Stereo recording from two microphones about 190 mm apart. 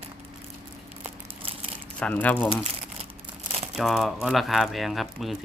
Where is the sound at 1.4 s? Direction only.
30° right (ahead or behind).